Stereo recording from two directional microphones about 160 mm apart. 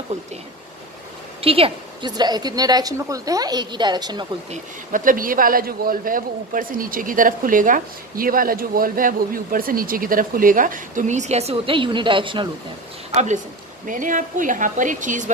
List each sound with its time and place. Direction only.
1.4 s a woman's voice: 35° right (ahead or behind)
4.5 s a man's voice: 55° right (ahead or behind); by 12.4 s 30° right (ahead or behind)
13.1 s a man's voice: 45° right (ahead or behind)